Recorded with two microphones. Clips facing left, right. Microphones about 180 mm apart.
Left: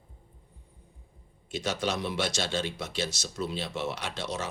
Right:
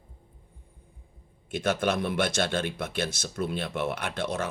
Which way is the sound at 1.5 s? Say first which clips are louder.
Right 4 dB; 55° right (ahead or behind).